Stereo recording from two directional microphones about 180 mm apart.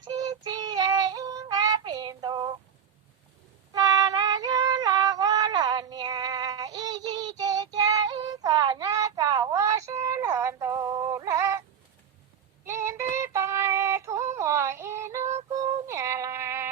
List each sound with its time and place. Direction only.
0.2 s child singing: 20° right (ahead or behind)
3.7 s female singing: 20° right (ahead or behind)
12.6 s synthetic singing: 15° right (ahead or behind)